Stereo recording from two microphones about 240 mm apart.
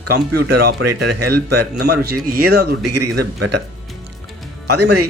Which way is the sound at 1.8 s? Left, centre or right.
Right.